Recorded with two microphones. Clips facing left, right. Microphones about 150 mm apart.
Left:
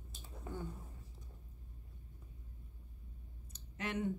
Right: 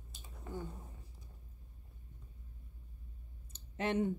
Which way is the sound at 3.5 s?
25° right (ahead or behind).